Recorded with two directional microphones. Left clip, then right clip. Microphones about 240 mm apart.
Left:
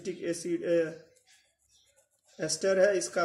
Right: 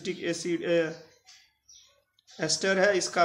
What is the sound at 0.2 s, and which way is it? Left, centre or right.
Speech, centre.